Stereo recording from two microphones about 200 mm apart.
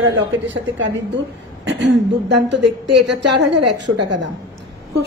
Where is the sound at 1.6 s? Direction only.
60° right (ahead or behind).